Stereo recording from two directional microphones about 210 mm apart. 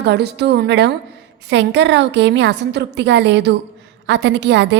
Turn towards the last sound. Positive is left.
turn(degrees=-55)  # may be behind; listen again after turning